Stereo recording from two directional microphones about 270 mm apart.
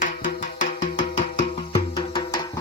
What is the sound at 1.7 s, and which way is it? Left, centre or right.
Music, centre.